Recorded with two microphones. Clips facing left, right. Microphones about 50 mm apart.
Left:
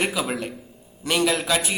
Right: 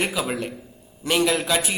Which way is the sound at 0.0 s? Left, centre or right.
Centre.